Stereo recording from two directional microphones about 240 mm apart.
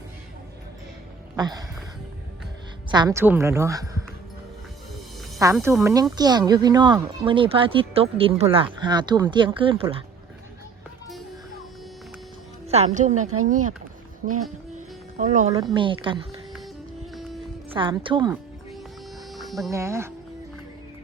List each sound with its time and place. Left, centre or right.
1.4 s a woman's voice: centre
2.9 s a woman's voice: centre
5.5 s a woman's voice: centre; by 10.0 s right
12.6 s a woman's voice: right
13.2 s speech: right
13.5 s speech: right
14.8 s speech: right
17.7 s speech: centre
19.3 s music: centre
19.7 s a woman's voice: centre